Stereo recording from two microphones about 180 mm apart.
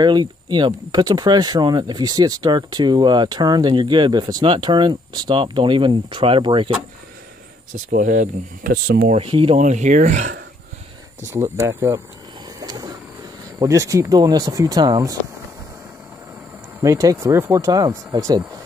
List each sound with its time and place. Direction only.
0.0 s speech: 25° right (ahead or behind)
7.7 s speech: 45° right (ahead or behind)
8.8 s speech: 60° right (ahead or behind)
9.1 s speech: 30° right (ahead or behind)
9.6 s speech: 45° right (ahead or behind)
11.2 s speech: 15° right (ahead or behind)
12.5 s vehicle: 20° right (ahead or behind)
13.6 s speech: 20° right (ahead or behind)
16.8 s speech: 20° right (ahead or behind)